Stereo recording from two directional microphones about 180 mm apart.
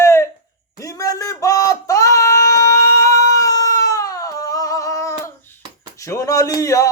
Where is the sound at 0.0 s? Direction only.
15° left (ahead or behind).